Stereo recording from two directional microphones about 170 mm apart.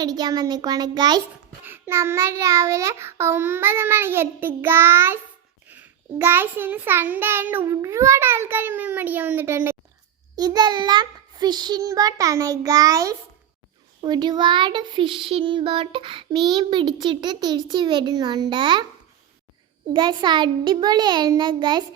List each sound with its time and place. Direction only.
0.0 s child singing: 25° right (ahead or behind)
1.6 s a child's voice: 15° right (ahead or behind)
10.3 s child singing: 25° right (ahead or behind)
19.9 s child singing: 25° right (ahead or behind)